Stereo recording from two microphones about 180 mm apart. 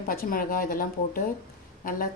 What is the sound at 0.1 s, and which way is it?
A woman's voice, 50° left (ahead or behind).